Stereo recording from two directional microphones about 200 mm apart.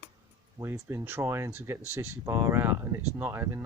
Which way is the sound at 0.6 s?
15° right (ahead or behind).